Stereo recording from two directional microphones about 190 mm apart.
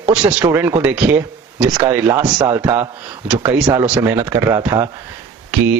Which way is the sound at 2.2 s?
20° right (ahead or behind).